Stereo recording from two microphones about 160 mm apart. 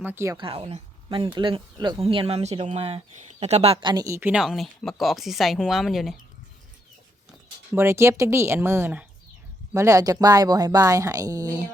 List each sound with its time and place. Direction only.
0.0 s speech: 15° right (ahead or behind)
0.3 s speech: 35° right (ahead or behind); by 6.1 s centre (ahead or behind)
7.8 s speech: 15° right (ahead or behind)